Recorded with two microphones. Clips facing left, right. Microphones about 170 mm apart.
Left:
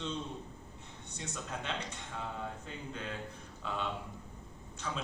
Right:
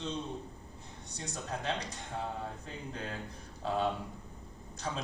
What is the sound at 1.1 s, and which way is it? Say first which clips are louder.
Speech: right 2 dB; 35° right (ahead or behind).